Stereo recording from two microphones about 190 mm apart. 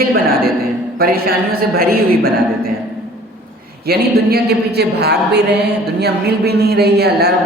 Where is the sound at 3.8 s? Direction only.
55° right (ahead or behind).